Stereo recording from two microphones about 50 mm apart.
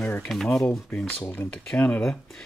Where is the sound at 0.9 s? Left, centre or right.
Left.